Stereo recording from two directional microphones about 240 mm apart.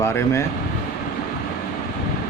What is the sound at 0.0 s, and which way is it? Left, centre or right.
Speech, centre.